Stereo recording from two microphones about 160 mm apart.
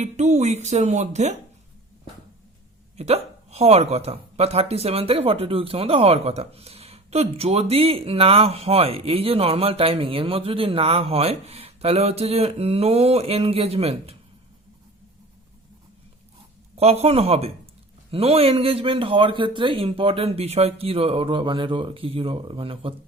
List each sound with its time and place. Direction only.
0.0 s speech: 45° right (ahead or behind)
3.0 s speech: 40° right (ahead or behind)
16.7 s speech: 40° right (ahead or behind)